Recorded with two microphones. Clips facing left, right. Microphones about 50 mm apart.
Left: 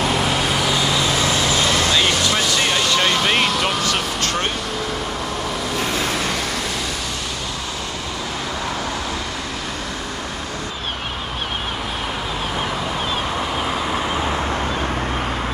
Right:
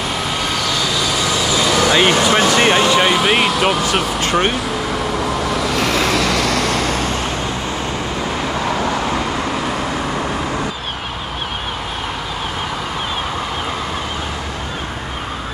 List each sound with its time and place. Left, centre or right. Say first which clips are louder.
1.5 s vehicle: right 2 dB; left
1.8 s a sound: right 5 dB; right
2.9 s air conditioning: right 4 dB; centre
3.8 s speech: right 4 dB; centre
5.8 s vehicle: right 5 dB; right